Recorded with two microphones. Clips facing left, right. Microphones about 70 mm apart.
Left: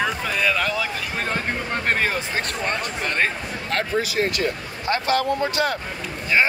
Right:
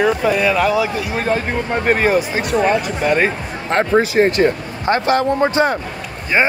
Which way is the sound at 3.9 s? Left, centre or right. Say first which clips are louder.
Right 11 dB; right.